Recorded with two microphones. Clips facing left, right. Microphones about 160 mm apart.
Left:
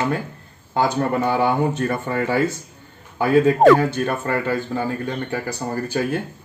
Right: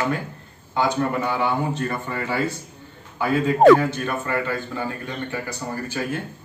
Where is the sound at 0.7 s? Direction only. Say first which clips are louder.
Left 2 dB; 40° left (ahead or behind).